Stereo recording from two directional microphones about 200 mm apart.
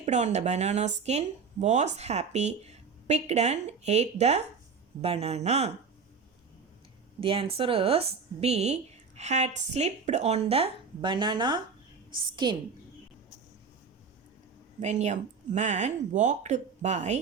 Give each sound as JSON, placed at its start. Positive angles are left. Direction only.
{"t": 0.0, "sound": "a woman's voice", "side_deg": -35}
{"t": 7.2, "sound": "speech", "side_deg": -25}
{"t": 14.8, "sound": "a woman's voice", "side_deg": -35}